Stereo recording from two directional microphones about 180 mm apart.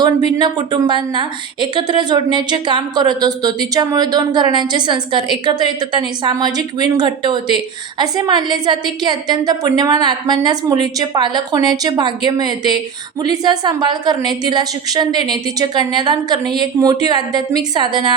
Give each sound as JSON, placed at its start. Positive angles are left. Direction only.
{"t": 0.0, "sound": "a woman's voice", "side_deg": -25}